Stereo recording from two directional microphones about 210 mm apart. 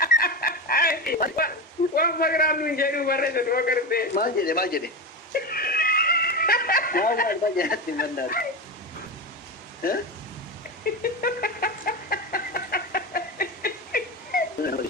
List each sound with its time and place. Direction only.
0.0 s a sound: 45° left (ahead or behind)
2.0 s a man's voice: 45° left (ahead or behind)
5.3 s snicker: 45° left (ahead or behind)
9.8 s a man's voice: 45° left (ahead or behind)
11.0 s chicken: 45° left (ahead or behind)